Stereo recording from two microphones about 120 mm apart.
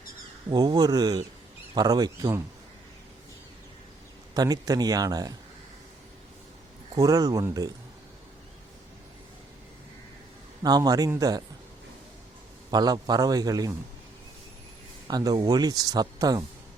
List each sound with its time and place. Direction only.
0.5 s speech: 35° right (ahead or behind)
4.4 s speech: 30° right (ahead or behind)
6.9 s speech: 30° right (ahead or behind)
10.6 s speech: 35° right (ahead or behind)
12.7 s speech: 35° right (ahead or behind)
15.0 s speech: 35° right (ahead or behind)